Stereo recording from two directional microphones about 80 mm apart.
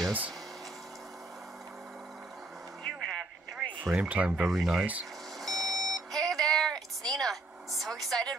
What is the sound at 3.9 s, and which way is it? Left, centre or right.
Speech, centre.